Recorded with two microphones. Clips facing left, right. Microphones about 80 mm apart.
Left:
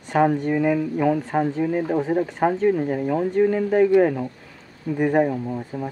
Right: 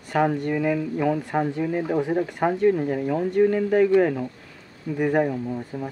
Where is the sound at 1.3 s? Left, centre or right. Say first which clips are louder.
Left 2 dB; centre.